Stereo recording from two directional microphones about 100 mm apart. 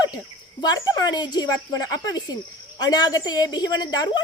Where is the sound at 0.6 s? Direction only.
40° left (ahead or behind).